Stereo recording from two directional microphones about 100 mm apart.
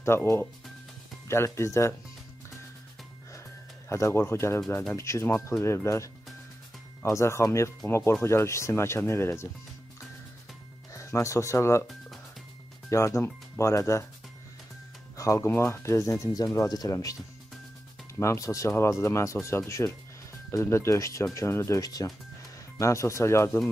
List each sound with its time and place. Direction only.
0.0 s speech: 25° left (ahead or behind)
3.9 s speech: 25° left (ahead or behind)
10.9 s speech: 30° left (ahead or behind)
12.9 s speech: 30° left (ahead or behind)
15.1 s speech: 30° left (ahead or behind)
18.2 s speech: 30° left (ahead or behind)